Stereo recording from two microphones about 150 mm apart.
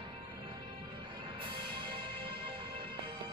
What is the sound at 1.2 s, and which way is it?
Music, 35° right (ahead or behind).